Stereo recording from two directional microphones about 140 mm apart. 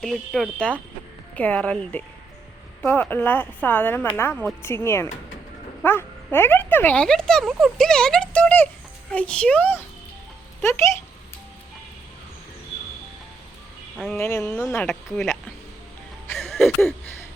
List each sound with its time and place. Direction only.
0.0 s speech: centre (ahead or behind); by 10.9 s 15° left (ahead or behind)
14.2 s speech: 20° left (ahead or behind)
16.3 s a sound: 15° left (ahead or behind)